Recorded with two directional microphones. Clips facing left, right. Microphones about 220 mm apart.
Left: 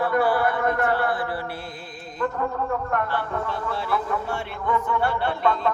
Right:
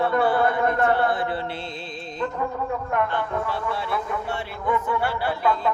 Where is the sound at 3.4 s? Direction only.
Centre (ahead or behind).